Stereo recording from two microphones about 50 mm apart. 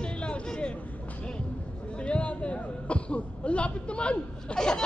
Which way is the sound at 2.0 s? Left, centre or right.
Left.